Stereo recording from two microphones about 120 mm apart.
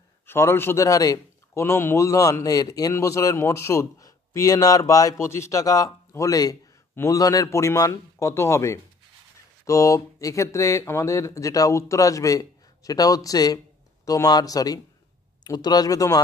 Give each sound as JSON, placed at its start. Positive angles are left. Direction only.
{"t": 0.3, "sound": "a man's voice", "side_deg": 20}